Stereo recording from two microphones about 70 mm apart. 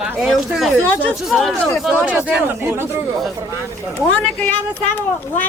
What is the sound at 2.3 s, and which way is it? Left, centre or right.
Speech, right.